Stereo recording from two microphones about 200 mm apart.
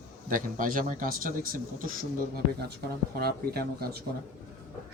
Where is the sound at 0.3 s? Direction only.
40° right (ahead or behind).